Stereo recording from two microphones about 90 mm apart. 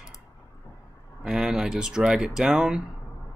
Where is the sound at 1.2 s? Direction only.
5° right (ahead or behind).